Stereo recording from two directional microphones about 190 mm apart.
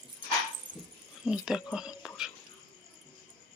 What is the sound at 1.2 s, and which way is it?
Speech, 5° right (ahead or behind).